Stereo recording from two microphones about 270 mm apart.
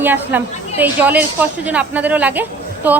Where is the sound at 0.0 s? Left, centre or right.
Centre.